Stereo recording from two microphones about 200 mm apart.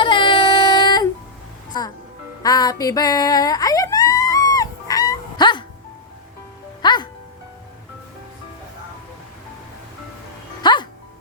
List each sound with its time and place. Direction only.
0.0 s child singing: 25° left (ahead or behind)
2.4 s a sound: 20° left (ahead or behind)
6.8 s music: 20° left (ahead or behind)
10.6 s music: 20° left (ahead or behind)